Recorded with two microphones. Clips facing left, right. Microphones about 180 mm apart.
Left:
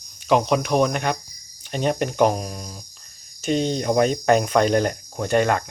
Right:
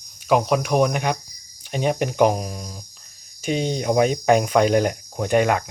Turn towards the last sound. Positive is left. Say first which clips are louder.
# right 1 dB
turn(degrees=-10)  # may be behind; listen again after turning